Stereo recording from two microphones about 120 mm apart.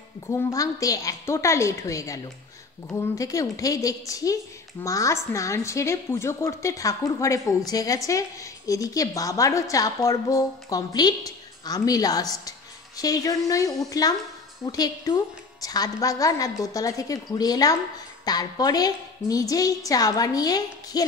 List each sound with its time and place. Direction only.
0.3 s a woman's voice: 25° left (ahead or behind)